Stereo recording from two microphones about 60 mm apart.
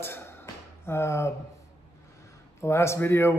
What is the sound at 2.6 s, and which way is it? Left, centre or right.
Speech, left.